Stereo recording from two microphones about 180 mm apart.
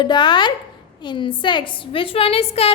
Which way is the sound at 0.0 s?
25° left (ahead or behind).